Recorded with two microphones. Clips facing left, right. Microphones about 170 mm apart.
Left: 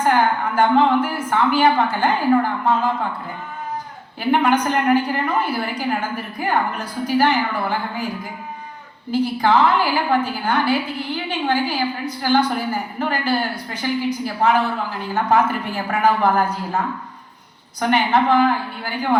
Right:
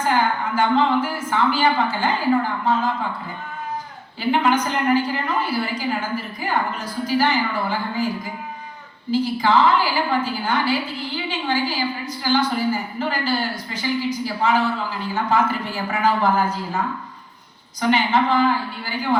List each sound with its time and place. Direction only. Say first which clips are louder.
0.0 s a sound: left 3 dB; 60° left (ahead or behind)
1.3 s a woman's voice: left 3 dB; 60° left (ahead or behind)
4.2 s a woman's voice: left 2 dB; 55° left (ahead or behind)
9.1 s a woman's voice: left 1 dB; 60° left (ahead or behind)
17.7 s a woman's voice: left 1 dB; 60° left (ahead or behind)